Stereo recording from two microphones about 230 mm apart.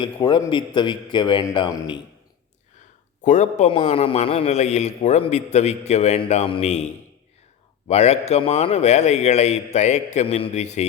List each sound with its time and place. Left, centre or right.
0.0 s a man's voice: left
3.2 s a man's voice: left
7.9 s a man's voice: left